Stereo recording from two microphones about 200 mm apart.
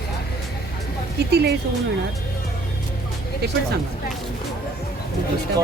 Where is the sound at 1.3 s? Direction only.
55° right (ahead or behind).